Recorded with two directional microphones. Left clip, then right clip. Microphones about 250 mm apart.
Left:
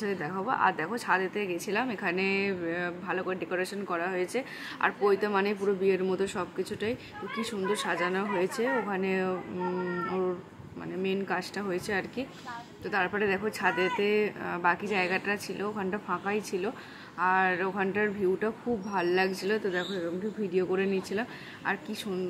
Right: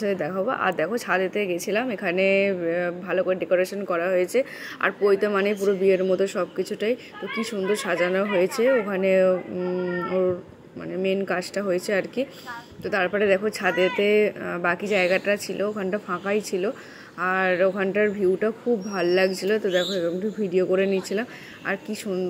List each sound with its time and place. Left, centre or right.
0.0 s speech: centre
11.0 s speech: centre